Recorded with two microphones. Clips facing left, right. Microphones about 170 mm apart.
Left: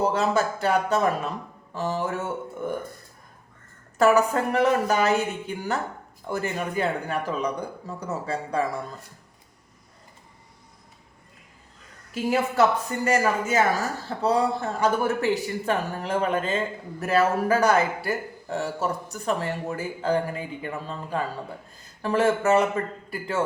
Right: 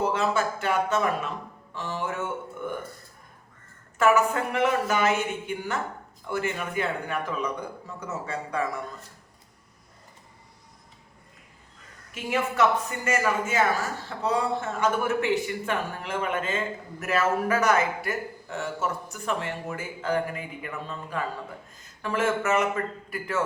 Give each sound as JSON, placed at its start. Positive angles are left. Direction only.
{"t": 0.0, "sound": "a man's voice", "side_deg": 40}
{"t": 3.9, "sound": "a man's voice", "side_deg": 35}
{"t": 12.1, "sound": "a man's voice", "side_deg": 35}